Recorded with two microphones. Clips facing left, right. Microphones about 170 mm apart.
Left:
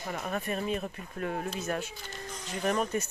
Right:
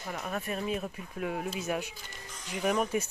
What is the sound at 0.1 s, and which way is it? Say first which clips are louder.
Speech: left 1 dB; centre (ahead or behind).